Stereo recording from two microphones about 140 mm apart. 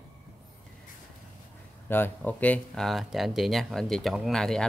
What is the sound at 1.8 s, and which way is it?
Speech, 15° left (ahead or behind).